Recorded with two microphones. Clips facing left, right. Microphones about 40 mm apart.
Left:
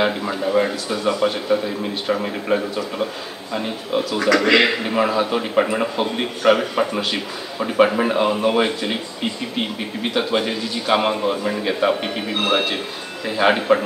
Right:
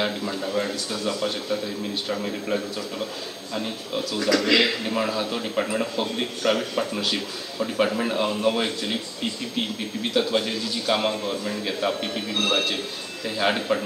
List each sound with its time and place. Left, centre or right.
0.0 s speech: centre